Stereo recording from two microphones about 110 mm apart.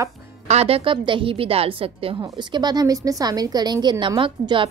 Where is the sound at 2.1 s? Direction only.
40° right (ahead or behind).